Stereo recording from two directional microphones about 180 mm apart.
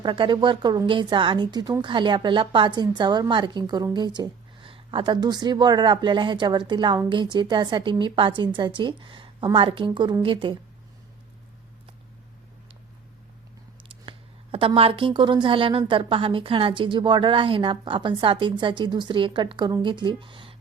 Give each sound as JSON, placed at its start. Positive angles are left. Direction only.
{"t": 0.0, "sound": "speech", "side_deg": -25}
{"t": 13.8, "sound": "speech", "side_deg": -30}